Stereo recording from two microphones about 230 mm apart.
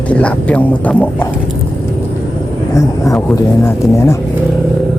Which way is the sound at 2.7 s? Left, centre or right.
Centre.